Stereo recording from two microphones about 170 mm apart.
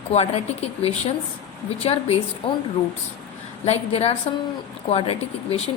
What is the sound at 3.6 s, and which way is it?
A woman's voice, 40° left (ahead or behind).